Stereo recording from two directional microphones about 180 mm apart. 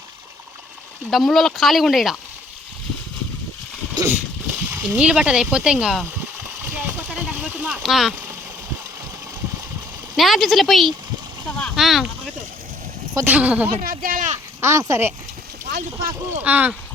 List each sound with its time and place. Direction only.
1.1 s speech: centre (ahead or behind)
3.9 s a sound: 15° right (ahead or behind)
4.7 s speech: 10° right (ahead or behind)
6.7 s a sound: 10° right (ahead or behind)
10.2 s speech: centre (ahead or behind)
13.8 s speech: 50° right (ahead or behind)
14.6 s speech: 15° right (ahead or behind)
15.7 s speech: 50° right (ahead or behind)
16.4 s speech: 10° right (ahead or behind)